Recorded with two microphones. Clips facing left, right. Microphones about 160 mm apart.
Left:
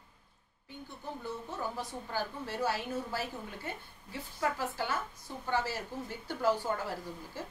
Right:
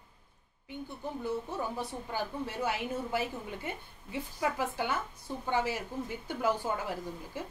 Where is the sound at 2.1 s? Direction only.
15° right (ahead or behind).